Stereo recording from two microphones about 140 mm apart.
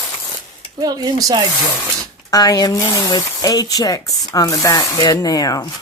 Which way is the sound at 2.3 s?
25° left (ahead or behind).